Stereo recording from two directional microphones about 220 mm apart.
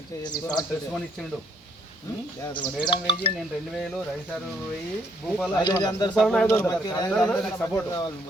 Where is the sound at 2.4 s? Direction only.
20° left (ahead or behind).